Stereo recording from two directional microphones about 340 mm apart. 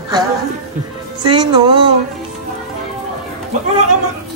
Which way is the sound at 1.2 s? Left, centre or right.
Centre.